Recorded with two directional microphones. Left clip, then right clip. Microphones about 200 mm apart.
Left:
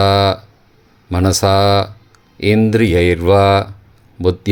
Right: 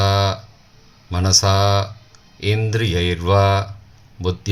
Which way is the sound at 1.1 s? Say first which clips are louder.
Left 4 dB; 40° left (ahead or behind).